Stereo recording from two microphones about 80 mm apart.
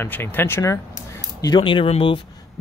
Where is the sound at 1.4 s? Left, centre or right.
Left.